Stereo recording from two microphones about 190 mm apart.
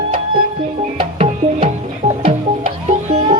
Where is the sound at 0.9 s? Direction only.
35° right (ahead or behind).